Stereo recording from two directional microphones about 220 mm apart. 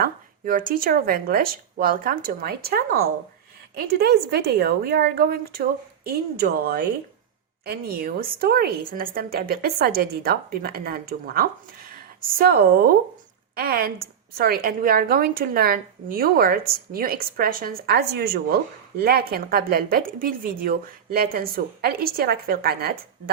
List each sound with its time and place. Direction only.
0.0 s a woman's voice: 40° right (ahead or behind)